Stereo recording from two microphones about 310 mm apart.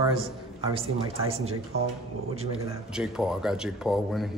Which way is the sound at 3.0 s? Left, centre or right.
Centre.